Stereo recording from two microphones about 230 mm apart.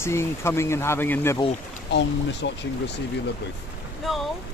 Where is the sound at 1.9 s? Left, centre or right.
Left.